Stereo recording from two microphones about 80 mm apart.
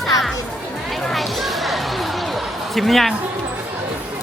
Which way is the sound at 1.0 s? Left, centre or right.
Centre.